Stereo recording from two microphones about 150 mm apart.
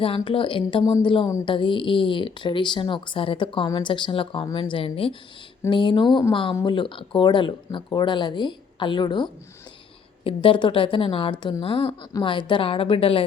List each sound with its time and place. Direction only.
0.0 s speech: 35° left (ahead or behind)